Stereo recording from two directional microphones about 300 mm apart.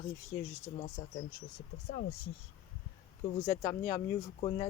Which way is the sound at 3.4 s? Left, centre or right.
Centre.